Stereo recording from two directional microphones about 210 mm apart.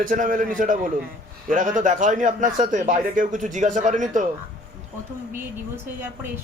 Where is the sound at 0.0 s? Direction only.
40° right (ahead or behind).